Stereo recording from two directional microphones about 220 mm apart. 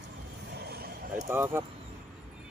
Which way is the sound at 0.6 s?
45° right (ahead or behind).